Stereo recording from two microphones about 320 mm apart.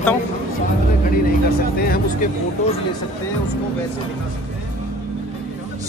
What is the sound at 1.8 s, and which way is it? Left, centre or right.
Speech, left.